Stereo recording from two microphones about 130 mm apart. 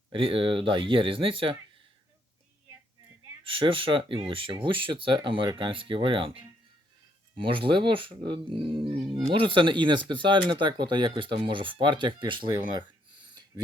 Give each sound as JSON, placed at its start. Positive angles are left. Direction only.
{"t": 0.1, "sound": "speech", "side_deg": -45}
{"t": 3.4, "sound": "speech", "side_deg": -45}